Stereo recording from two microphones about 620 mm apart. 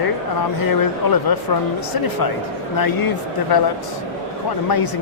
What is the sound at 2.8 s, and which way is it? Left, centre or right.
Speech, left.